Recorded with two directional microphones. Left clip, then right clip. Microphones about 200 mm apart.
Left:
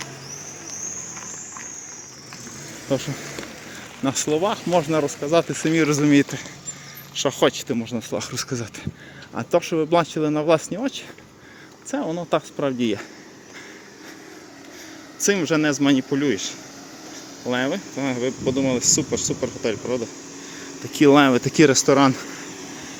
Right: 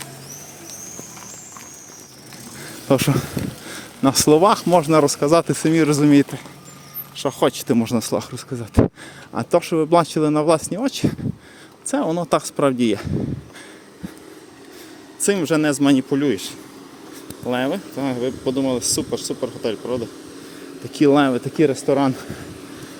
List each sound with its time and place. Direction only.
2.9 s speech: 50° right (ahead or behind)
4.0 s speech: 35° right (ahead or behind)
5.5 s speech: 25° right (ahead or behind)
7.5 s speech: 30° right (ahead or behind)
8.3 s speech: 5° right (ahead or behind)
9.3 s speech: 20° right (ahead or behind)
15.2 s speech: 15° right (ahead or behind); by 21.9 s 15° left (ahead or behind)